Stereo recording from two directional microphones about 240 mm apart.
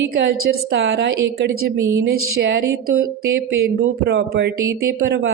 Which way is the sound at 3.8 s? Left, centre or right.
Right.